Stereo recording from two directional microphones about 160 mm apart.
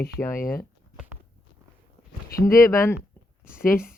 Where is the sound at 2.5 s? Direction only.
20° left (ahead or behind).